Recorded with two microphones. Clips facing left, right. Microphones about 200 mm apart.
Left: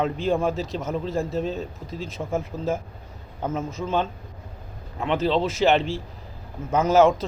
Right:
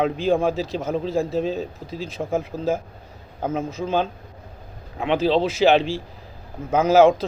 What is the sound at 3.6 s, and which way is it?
Speech, 35° right (ahead or behind).